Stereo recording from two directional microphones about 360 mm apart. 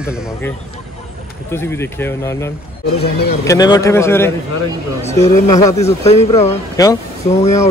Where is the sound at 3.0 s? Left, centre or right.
Left.